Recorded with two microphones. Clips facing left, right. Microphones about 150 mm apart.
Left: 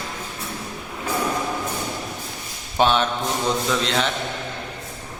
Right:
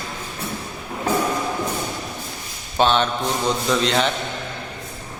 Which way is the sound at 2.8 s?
10° left (ahead or behind).